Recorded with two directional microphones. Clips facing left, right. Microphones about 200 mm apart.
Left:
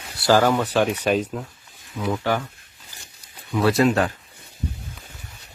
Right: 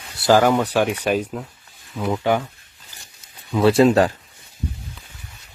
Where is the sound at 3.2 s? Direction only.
25° right (ahead or behind).